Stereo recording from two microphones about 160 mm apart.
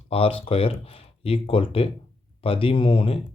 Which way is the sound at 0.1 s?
35° left (ahead or behind).